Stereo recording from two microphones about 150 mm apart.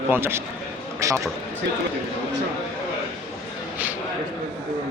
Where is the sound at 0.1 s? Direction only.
15° right (ahead or behind).